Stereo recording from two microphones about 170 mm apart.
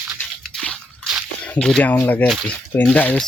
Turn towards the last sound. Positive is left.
turn(degrees=5)  # may be behind; listen again after turning